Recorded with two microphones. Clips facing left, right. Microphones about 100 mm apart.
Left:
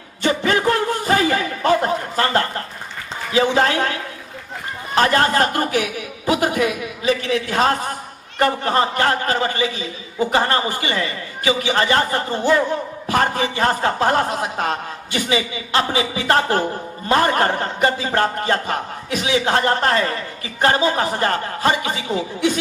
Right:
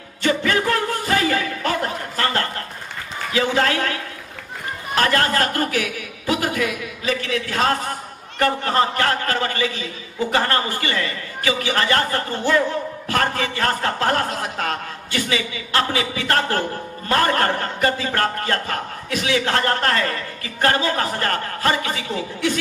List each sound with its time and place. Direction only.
0.2 s a sound: 25° left (ahead or behind)
3.3 s a man's voice: 25° left (ahead or behind)
4.9 s a man's voice: 25° left (ahead or behind)